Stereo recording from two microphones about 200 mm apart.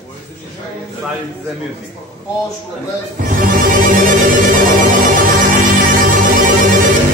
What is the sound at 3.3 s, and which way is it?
Music, 40° right (ahead or behind).